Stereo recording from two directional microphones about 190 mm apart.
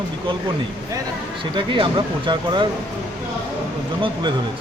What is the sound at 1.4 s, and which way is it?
A man's voice, 25° right (ahead or behind).